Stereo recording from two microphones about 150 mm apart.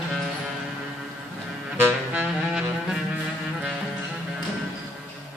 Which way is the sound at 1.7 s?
10° right (ahead or behind).